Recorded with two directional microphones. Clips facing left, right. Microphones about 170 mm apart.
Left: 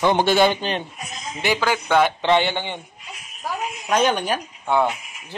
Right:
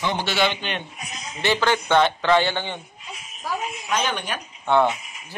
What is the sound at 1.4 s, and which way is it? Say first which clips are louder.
Speech: even; 10° left (ahead or behind).